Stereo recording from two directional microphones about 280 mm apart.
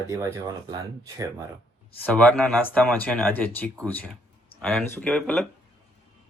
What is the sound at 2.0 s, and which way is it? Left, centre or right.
Speech, centre.